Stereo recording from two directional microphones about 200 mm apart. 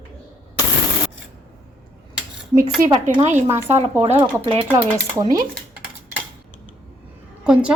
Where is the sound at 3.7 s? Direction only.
30° right (ahead or behind).